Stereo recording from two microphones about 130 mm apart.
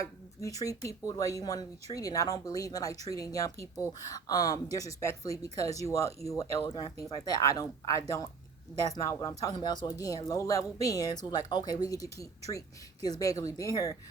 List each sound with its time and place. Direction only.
0.4 s speech: 25° left (ahead or behind)
9.4 s speech: 30° left (ahead or behind)